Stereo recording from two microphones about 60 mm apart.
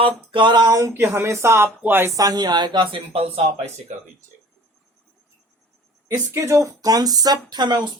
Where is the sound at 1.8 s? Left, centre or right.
Right.